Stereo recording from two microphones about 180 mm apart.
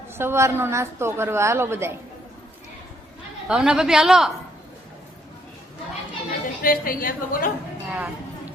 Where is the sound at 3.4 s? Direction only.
5° right (ahead or behind).